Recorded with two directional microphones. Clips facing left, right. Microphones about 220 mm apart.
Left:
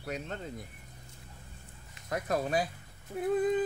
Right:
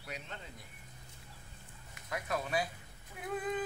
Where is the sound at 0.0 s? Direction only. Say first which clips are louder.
Left 8 dB; 45° left (ahead or behind).